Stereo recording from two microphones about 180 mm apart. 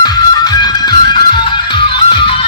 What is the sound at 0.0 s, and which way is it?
Music, 20° left (ahead or behind).